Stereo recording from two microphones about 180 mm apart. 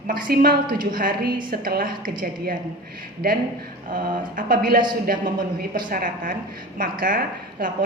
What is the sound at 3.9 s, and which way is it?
A woman's voice, 50° right (ahead or behind).